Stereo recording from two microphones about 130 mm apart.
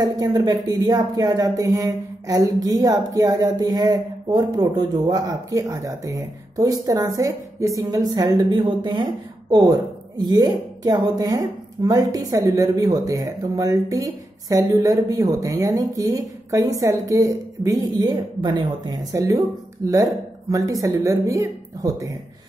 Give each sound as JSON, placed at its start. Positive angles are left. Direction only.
{"t": 0.0, "sound": "speech", "side_deg": -30}